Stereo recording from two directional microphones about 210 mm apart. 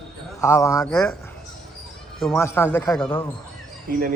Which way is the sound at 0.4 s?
15° left (ahead or behind).